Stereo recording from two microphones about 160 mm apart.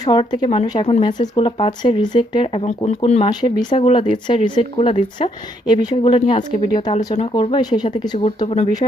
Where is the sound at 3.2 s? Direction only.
30° left (ahead or behind).